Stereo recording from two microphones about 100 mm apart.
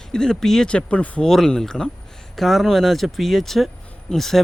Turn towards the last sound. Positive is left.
turn(degrees=5)  # may be behind; listen again after turning